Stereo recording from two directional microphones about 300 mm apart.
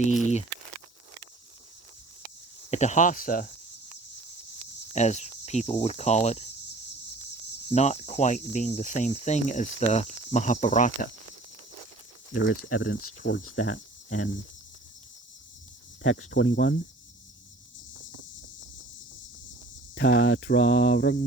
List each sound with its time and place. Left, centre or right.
0.0 s speech: left
2.6 s cricket: left
4.9 s cricket: left
7.7 s cricket: left
12.4 s cricket: left
13.0 s cricket: left
16.0 s cricket: left
20.0 s cricket: left